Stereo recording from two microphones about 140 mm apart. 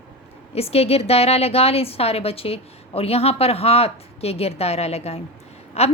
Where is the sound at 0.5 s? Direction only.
45° left (ahead or behind).